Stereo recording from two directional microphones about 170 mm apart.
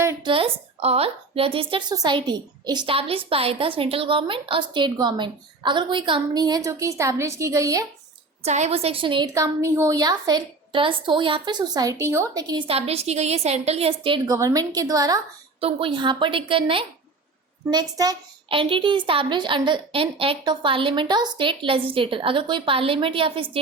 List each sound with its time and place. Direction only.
0.2 s a woman's voice: 30° right (ahead or behind)
8.4 s a woman's voice: 40° right (ahead or behind)
14.3 s a woman's voice: 20° right (ahead or behind)